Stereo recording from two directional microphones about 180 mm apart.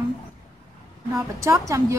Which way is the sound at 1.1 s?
15° right (ahead or behind).